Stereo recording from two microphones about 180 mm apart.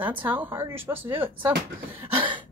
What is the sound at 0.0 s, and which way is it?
Speech, 10° right (ahead or behind).